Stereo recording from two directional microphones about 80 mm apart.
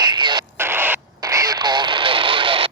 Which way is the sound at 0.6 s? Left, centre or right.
Right.